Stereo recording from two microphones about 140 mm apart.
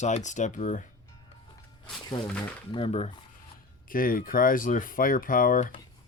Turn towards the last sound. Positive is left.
turn(degrees=75)  # may be behind; listen again after turning